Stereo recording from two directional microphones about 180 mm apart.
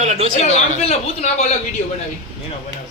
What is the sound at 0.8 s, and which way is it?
Speech, 35° left (ahead or behind).